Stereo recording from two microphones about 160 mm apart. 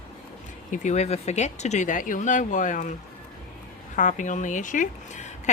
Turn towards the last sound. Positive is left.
turn(degrees=50)  # may be behind; listen again after turning